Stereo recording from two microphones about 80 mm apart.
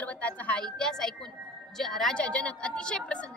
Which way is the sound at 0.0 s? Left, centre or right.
Centre.